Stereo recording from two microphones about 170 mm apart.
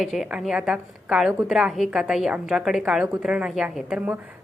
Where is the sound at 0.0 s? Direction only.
Centre (ahead or behind).